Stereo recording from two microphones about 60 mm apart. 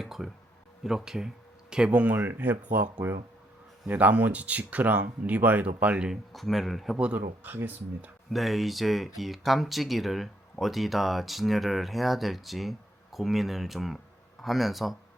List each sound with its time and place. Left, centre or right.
0.0 s speech: centre
1.7 s speech: centre
2.1 s speech: right
6.1 s speech: centre
6.9 s speech: centre
7.4 s speech: right
8.3 s speech: centre